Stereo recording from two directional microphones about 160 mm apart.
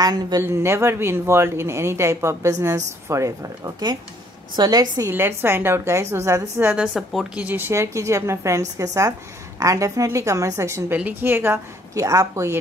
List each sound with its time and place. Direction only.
0.0 s a woman's voice: 25° right (ahead or behind)